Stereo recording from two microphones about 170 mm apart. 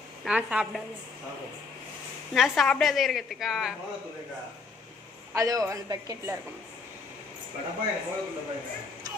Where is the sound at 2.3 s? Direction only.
Centre (ahead or behind).